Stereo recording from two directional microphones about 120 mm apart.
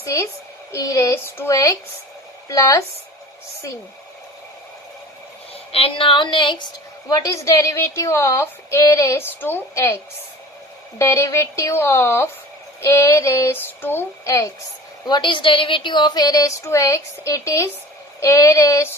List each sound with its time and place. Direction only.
0.0 s a woman's voice: 25° left (ahead or behind)
5.7 s a woman's voice: 50° left (ahead or behind)
7.1 s a woman's voice: 25° left (ahead or behind)
15.0 s a woman's voice: 40° left (ahead or behind)